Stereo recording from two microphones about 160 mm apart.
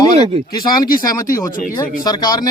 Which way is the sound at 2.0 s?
25° left (ahead or behind).